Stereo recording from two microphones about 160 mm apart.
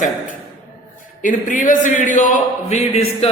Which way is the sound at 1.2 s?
55° left (ahead or behind).